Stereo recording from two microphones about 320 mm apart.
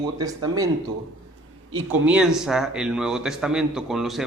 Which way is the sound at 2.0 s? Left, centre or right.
Centre.